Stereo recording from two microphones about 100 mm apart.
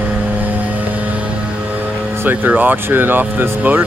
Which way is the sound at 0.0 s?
15° right (ahead or behind).